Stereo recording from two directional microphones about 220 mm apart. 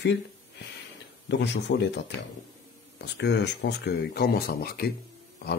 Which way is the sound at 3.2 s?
50° left (ahead or behind).